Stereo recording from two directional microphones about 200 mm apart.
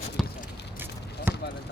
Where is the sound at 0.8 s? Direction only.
10° right (ahead or behind).